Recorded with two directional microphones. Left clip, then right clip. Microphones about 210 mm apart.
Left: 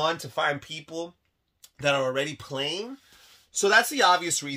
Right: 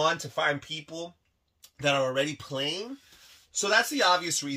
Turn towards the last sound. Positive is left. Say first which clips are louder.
# left 3 dB
turn(degrees=50)  # may be behind; listen again after turning